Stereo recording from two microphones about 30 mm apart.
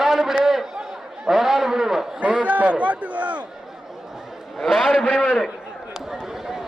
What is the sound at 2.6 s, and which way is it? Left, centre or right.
Speech, right.